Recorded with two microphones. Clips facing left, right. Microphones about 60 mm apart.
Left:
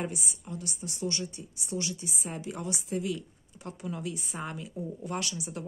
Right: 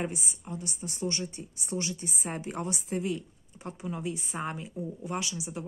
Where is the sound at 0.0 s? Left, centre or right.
Right.